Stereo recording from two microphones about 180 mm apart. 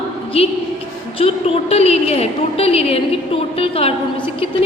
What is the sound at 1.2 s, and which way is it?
A woman's voice, 30° left (ahead or behind).